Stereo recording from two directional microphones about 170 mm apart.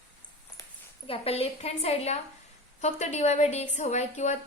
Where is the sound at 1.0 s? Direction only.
35° left (ahead or behind).